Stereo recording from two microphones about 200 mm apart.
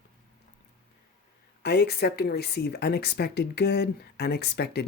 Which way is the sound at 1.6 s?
55° left (ahead or behind).